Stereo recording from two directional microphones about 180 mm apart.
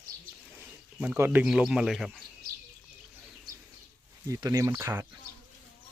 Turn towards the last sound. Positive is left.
turn(degrees=-20)  # may be behind; listen again after turning